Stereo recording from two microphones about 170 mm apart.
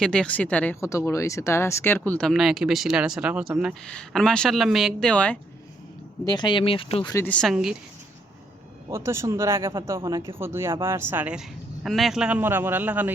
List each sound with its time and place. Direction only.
0.0 s speech: 5° left (ahead or behind)
6.2 s speech: 25° left (ahead or behind)
7.1 s speech: 10° left (ahead or behind)
7.5 s speech: 5° right (ahead or behind)
8.9 s speech: 15° right (ahead or behind)